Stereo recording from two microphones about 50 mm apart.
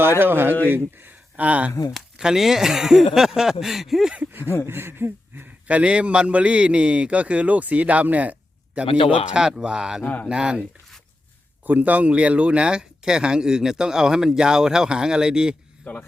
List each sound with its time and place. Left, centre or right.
0.2 s speech: right
0.7 s a sound: right
1.5 s a man's voice: right
2.1 s speech: centre
4.6 s speech: right
5.6 s a man's voice: right
10.0 s speech: left
10.2 s a man's voice: right
11.6 s speech: right; by 15.5 s centre
15.8 s speech: left